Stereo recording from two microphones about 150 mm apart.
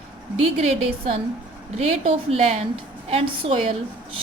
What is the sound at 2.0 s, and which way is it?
A woman's voice, 40° right (ahead or behind).